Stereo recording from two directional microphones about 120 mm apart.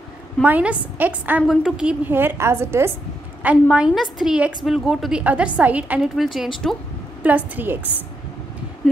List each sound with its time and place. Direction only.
0.4 s a woman's voice: 10° right (ahead or behind)
1.4 s a woman's voice: 5° right (ahead or behind); by 2.9 s 20° right (ahead or behind)
3.7 s a woman's voice: 5° right (ahead or behind)
7.2 s a woman's voice: 15° right (ahead or behind)